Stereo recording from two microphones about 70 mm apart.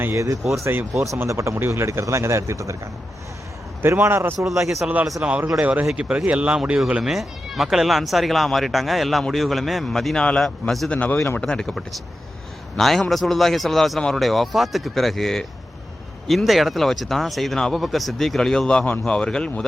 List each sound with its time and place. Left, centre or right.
0.0 s speech: right
4.0 s speech: right
4.5 s speech: right
5.2 s a man's voice: centre
10.9 s a man's voice: centre